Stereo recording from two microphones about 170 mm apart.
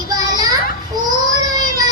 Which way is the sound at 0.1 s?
25° right (ahead or behind).